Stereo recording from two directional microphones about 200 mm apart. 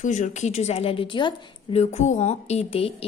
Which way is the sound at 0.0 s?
35° left (ahead or behind).